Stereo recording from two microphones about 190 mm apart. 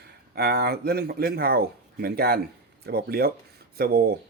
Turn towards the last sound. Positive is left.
turn(degrees=-55)  # may be behind; listen again after turning